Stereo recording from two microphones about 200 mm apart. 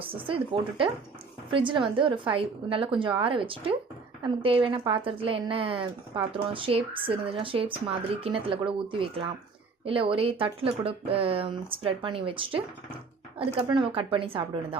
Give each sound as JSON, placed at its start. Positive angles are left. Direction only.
{"t": 0.0, "sound": "a woman's voice", "side_deg": -25}